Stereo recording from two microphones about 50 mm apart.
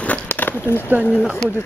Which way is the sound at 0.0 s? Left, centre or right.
Left.